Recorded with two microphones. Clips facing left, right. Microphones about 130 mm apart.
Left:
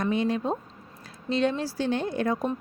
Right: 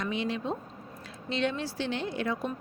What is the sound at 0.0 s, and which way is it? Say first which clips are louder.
A woman's voice: left 6 dB; 45° left (ahead or behind).